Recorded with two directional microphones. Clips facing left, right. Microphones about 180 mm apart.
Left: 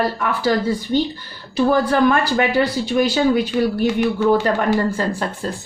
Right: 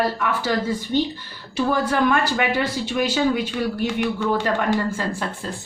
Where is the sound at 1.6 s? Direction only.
40° left (ahead or behind).